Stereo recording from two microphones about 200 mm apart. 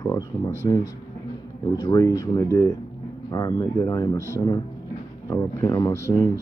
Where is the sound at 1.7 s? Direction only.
20° left (ahead or behind).